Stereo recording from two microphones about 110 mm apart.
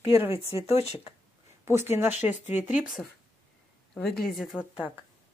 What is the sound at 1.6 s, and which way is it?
Speech, 20° right (ahead or behind).